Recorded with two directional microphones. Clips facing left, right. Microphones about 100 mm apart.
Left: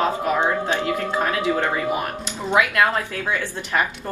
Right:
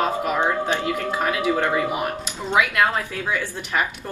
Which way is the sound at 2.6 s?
35° left (ahead or behind).